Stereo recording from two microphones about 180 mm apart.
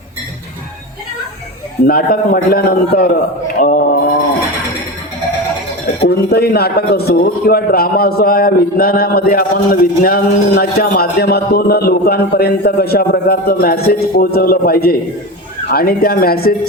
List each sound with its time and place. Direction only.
1.9 s a man's voice: 55° left (ahead or behind)
3.6 s mantra: 50° left (ahead or behind)
6.1 s a man's voice: 60° left (ahead or behind)